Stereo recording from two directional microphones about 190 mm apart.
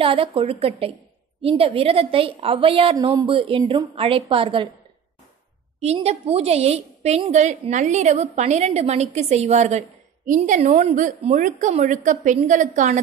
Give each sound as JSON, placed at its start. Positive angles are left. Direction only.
{"t": 0.0, "sound": "a woman's voice", "side_deg": -30}
{"t": 5.8, "sound": "a woman's voice", "side_deg": -35}